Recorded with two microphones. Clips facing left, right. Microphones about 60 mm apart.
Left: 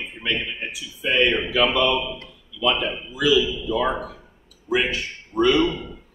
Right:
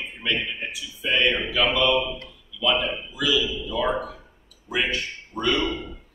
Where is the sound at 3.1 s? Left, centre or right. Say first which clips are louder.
Left 6 dB; left.